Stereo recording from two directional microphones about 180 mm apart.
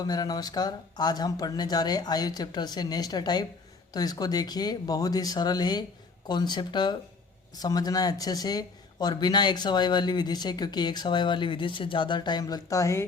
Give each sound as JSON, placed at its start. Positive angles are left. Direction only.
{"t": 0.0, "sound": "speech", "side_deg": 20}